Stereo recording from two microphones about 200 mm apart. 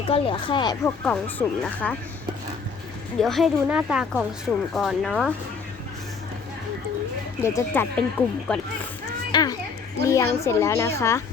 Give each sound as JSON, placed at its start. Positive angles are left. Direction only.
{"t": 0.1, "sound": "speech", "side_deg": 25}
{"t": 1.0, "sound": "a woman's voice", "side_deg": 5}
{"t": 3.2, "sound": "a woman's voice", "side_deg": 0}
{"t": 7.4, "sound": "a woman's voice", "side_deg": 10}
{"t": 9.3, "sound": "children playing", "side_deg": 20}
{"t": 10.1, "sound": "a woman's voice", "side_deg": 15}